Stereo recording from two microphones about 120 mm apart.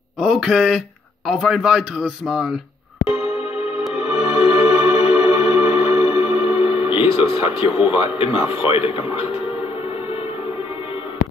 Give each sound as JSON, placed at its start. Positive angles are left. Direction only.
{"t": 0.2, "sound": "speech", "side_deg": -5}
{"t": 3.1, "sound": "music", "side_deg": 55}
{"t": 7.2, "sound": "speech", "side_deg": 50}